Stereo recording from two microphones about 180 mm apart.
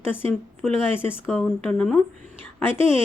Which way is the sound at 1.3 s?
5° left (ahead or behind).